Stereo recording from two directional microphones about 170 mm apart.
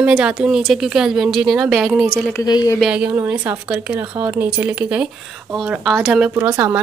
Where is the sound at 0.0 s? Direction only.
5° right (ahead or behind).